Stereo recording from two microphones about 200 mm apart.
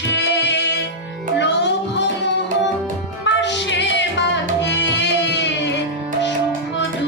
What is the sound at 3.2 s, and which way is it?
Music, 60° left (ahead or behind).